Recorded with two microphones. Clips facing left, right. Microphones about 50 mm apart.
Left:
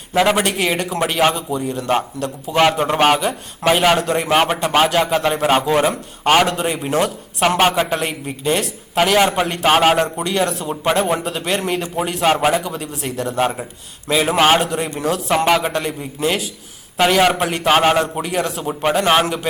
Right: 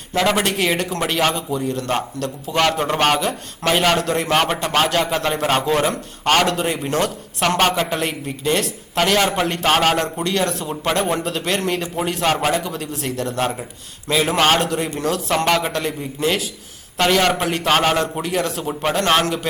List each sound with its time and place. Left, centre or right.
0.1 s a man's voice: centre